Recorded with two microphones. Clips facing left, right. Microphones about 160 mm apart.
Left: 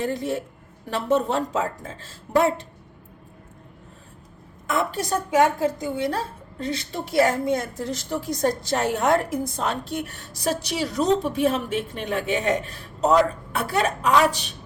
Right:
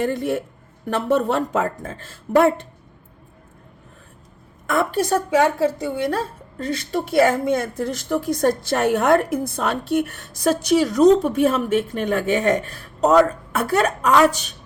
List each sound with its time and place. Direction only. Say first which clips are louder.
0.0 s speech: right 4 dB; 60° right (ahead or behind)
4.6 s speech: right 5 dB; 55° right (ahead or behind)
6.6 s a woman's voice: right 5 dB; 55° right (ahead or behind)